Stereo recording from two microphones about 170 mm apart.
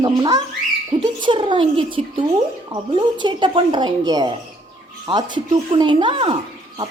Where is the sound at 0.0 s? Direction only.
25° right (ahead or behind).